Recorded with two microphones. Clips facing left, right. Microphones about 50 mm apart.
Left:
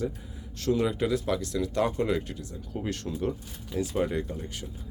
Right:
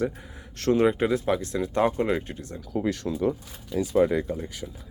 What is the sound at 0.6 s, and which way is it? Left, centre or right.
Speech, right.